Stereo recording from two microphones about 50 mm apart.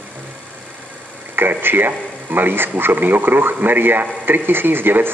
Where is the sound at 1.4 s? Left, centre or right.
Right.